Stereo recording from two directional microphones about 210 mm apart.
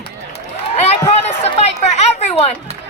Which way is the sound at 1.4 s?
30° left (ahead or behind).